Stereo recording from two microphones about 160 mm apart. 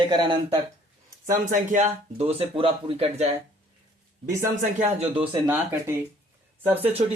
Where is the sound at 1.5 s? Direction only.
55° right (ahead or behind).